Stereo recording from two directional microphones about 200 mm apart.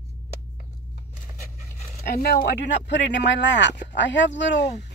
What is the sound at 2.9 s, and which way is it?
Speech, 60° left (ahead or behind).